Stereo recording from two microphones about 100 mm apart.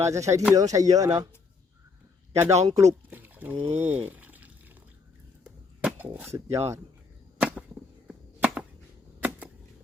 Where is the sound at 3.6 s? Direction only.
90° right.